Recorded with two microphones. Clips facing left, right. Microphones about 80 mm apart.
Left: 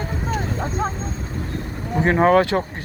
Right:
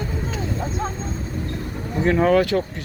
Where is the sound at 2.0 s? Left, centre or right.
Left.